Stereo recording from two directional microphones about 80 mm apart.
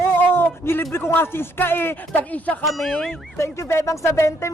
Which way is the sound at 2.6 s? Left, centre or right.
Centre.